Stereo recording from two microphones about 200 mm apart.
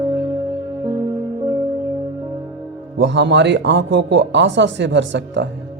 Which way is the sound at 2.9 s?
60° right (ahead or behind).